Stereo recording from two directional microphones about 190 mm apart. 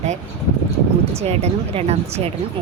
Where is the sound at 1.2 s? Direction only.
35° right (ahead or behind).